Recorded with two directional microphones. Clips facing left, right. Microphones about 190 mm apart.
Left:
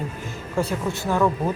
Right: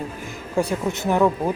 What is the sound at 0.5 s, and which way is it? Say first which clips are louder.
Speech: right 2 dB; 15° right (ahead or behind).